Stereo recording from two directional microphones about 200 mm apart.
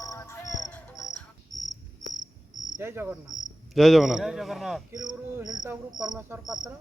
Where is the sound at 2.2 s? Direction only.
40° right (ahead or behind).